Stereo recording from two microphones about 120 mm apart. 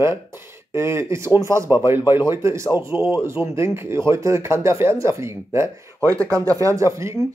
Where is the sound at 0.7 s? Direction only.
20° right (ahead or behind).